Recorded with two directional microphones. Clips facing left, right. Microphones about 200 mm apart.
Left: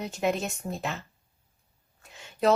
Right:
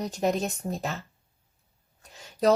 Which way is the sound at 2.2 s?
40° right (ahead or behind).